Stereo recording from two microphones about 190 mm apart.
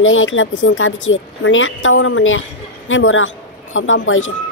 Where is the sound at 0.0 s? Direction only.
90° left.